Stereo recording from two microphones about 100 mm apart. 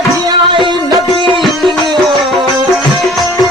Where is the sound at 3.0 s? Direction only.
Centre (ahead or behind).